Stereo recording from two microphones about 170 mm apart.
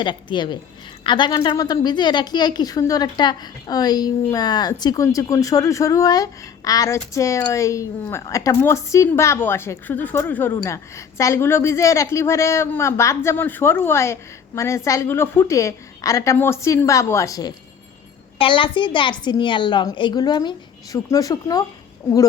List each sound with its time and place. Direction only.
0.0 s a woman's voice: 30° left (ahead or behind)
18.3 s a woman's voice: 30° left (ahead or behind)